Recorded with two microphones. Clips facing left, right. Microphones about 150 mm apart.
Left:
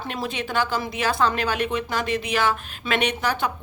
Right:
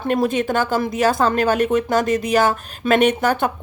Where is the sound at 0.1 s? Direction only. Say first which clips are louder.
Right 10 dB; 50° right (ahead or behind).